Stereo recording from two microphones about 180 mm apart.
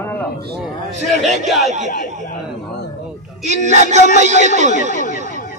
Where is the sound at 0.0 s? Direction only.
10° left (ahead or behind).